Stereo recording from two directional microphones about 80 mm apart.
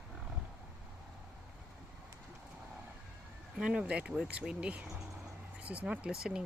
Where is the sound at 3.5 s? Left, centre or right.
Centre.